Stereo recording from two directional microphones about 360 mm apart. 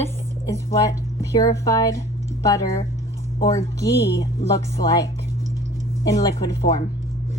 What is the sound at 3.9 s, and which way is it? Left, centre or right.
Speech, left.